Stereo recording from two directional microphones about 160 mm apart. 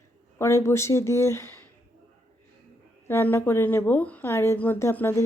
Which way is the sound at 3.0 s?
15° left (ahead or behind).